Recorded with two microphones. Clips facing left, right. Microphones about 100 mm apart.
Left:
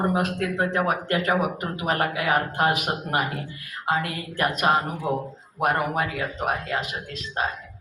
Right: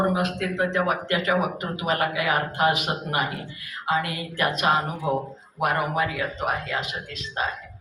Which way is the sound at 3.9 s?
40° left (ahead or behind).